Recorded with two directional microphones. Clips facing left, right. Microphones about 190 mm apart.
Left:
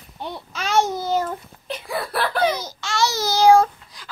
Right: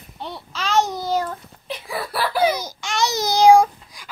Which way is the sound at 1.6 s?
Centre (ahead or behind).